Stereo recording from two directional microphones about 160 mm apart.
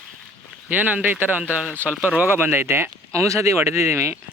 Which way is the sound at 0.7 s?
10° right (ahead or behind).